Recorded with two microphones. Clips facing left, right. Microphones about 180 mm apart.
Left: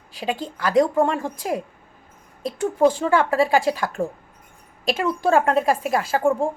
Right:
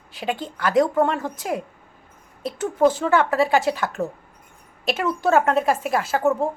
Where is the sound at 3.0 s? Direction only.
30° left (ahead or behind).